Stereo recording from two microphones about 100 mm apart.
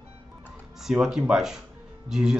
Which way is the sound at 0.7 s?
5° right (ahead or behind).